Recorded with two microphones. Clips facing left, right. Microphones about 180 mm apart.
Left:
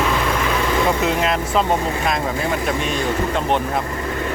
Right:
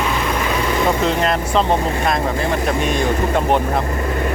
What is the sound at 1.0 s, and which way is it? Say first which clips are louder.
Vehicle: right 1 dB; 5° left (ahead or behind).